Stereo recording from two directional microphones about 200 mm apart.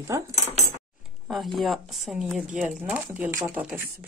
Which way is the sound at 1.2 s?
Centre (ahead or behind).